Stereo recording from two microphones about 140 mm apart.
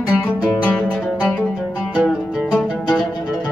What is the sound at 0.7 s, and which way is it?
Music, centre (ahead or behind).